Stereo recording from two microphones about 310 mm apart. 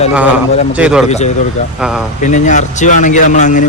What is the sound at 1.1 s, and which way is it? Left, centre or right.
Speech, left.